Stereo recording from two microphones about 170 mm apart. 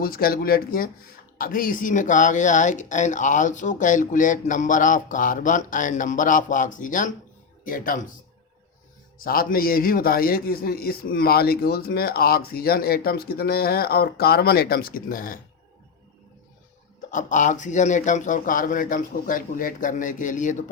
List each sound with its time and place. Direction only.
0.0 s a man's voice: 60° left (ahead or behind)
9.1 s a man's voice: 60° left (ahead or behind)
17.1 s speech: 50° left (ahead or behind)